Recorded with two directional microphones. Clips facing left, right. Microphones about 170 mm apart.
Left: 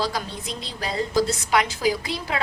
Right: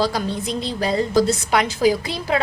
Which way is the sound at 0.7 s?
30° right (ahead or behind).